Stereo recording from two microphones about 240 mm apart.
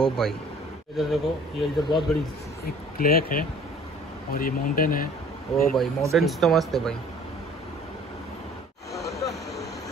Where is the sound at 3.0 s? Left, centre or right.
Left.